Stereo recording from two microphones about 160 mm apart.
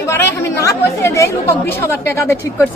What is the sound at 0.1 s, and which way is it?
Speech, 15° left (ahead or behind).